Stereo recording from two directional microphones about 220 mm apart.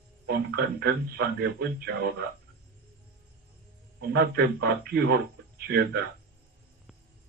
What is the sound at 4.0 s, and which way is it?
A man's voice, 45° right (ahead or behind).